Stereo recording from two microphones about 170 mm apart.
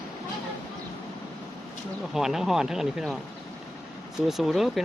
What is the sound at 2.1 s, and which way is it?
Speech, centre (ahead or behind).